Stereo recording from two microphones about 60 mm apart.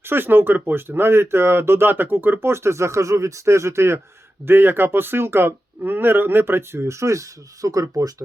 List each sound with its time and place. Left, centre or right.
0.0 s speech: right
4.4 s speech: right